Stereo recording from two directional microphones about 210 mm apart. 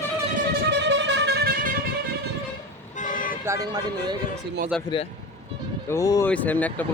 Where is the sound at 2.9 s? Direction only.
40° left (ahead or behind).